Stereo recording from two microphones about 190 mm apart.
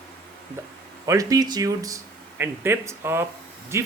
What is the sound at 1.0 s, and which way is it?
Speech, 15° right (ahead or behind).